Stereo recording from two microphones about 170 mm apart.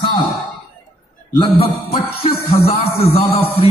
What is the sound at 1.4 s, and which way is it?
Speech, 35° left (ahead or behind).